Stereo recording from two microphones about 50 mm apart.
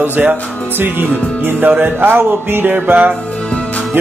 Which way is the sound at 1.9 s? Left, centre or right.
Right.